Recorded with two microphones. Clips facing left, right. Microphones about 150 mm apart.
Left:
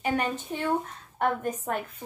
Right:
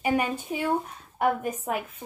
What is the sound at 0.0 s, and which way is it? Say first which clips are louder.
Speech: right 2 dB; 10° right (ahead or behind).